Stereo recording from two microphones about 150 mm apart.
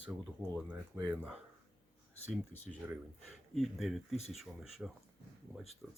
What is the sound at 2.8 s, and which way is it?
Speech, 10° right (ahead or behind).